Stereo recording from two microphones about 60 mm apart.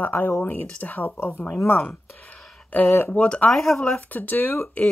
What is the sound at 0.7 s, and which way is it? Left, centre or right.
Speech, left.